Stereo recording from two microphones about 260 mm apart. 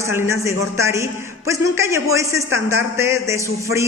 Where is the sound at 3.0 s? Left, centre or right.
Centre.